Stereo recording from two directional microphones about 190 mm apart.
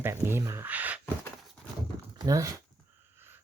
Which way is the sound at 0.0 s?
15° right (ahead or behind).